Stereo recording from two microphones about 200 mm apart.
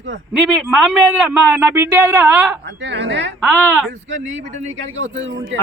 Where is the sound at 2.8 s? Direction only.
60° right (ahead or behind).